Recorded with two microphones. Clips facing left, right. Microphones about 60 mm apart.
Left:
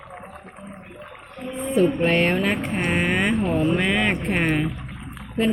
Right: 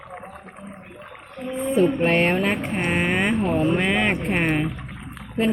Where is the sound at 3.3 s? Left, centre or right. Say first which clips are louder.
Even; right.